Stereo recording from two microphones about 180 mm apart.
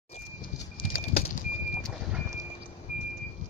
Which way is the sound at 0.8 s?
30° left (ahead or behind).